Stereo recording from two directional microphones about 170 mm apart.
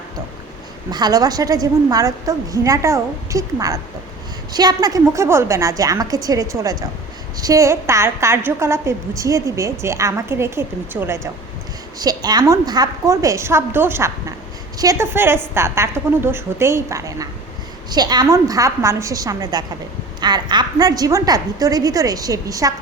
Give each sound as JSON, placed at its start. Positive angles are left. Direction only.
{"t": 0.9, "sound": "a woman's voice", "side_deg": -25}